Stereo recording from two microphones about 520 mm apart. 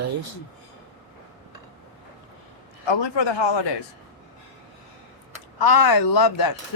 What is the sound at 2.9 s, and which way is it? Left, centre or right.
Speech, left.